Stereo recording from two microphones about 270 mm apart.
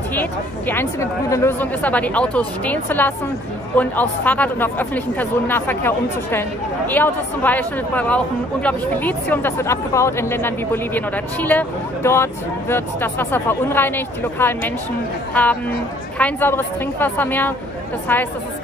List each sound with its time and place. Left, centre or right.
0.1 s a woman's voice: centre
16.2 s speech: centre